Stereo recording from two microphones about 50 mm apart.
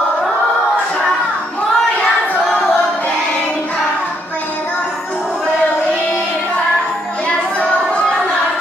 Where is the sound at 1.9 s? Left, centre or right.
Left.